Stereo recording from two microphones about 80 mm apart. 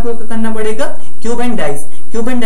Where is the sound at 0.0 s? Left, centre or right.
Centre.